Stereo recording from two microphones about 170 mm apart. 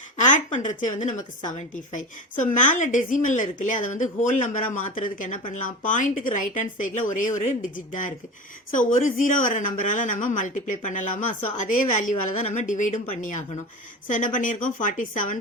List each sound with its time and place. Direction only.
0.2 s a woman's voice: 45° left (ahead or behind)
8.7 s a woman's voice: 50° left (ahead or behind)